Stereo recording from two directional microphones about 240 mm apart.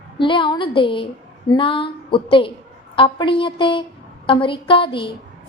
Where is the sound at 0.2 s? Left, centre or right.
Centre.